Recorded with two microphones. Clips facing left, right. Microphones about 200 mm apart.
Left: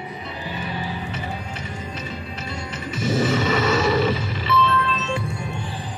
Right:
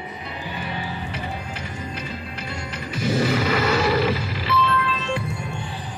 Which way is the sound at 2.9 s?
25° left (ahead or behind).